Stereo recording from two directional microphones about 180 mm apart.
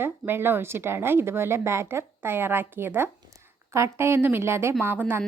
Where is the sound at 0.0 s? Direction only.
10° right (ahead or behind).